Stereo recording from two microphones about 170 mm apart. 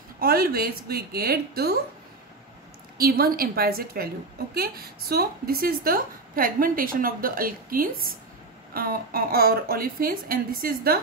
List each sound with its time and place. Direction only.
0.2 s a woman's voice: 65° right (ahead or behind)
3.0 s a woman's voice: 65° right (ahead or behind)